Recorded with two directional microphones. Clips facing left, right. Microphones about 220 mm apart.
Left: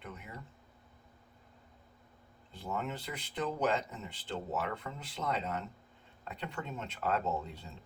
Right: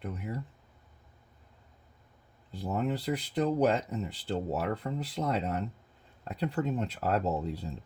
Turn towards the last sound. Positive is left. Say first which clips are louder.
# right 5 dB
turn(degrees=-35)  # may be behind; listen again after turning